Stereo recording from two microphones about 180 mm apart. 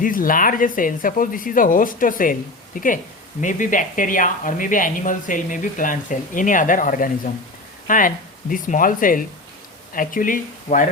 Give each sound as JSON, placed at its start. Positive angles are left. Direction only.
{"t": 0.0, "sound": "speech", "side_deg": 50}